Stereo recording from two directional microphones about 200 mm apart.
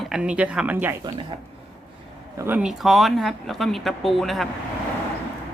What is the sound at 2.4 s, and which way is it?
Speech, 10° right (ahead or behind).